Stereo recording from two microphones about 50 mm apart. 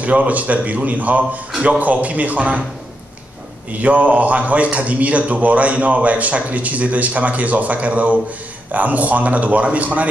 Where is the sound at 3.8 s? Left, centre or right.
Right.